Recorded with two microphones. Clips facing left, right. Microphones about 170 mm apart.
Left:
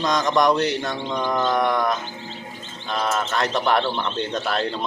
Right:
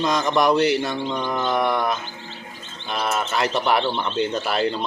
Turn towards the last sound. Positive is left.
turn(degrees=-5)  # may be behind; listen again after turning